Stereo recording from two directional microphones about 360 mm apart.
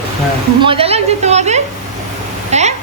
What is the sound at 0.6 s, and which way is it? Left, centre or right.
A woman's voice, centre.